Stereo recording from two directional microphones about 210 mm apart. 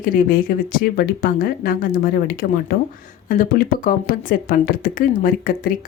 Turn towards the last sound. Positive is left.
turn(degrees=45)  # may be behind; listen again after turning